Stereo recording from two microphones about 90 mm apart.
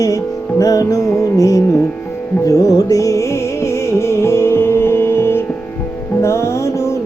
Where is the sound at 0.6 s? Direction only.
40° left (ahead or behind).